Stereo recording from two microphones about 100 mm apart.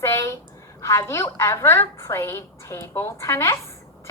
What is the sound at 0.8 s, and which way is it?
A woman's voice, 30° left (ahead or behind).